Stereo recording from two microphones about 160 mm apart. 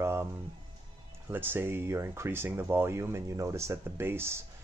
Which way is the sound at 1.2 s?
15° right (ahead or behind).